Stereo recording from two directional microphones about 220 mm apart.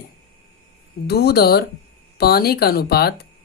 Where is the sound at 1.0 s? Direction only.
45° left (ahead or behind).